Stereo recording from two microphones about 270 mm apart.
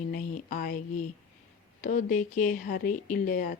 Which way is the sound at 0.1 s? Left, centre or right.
Left.